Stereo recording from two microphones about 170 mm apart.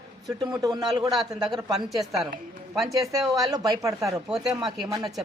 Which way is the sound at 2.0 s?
Centre (ahead or behind).